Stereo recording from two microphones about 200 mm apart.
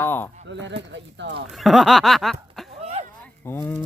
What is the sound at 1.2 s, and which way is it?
Speech, 60° right (ahead or behind).